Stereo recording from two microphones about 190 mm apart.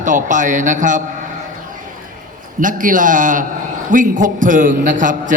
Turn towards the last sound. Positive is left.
turn(degrees=-45)  # may be behind; listen again after turning